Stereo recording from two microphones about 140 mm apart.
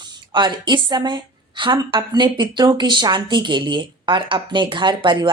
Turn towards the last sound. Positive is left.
turn(degrees=-35)  # may be behind; listen again after turning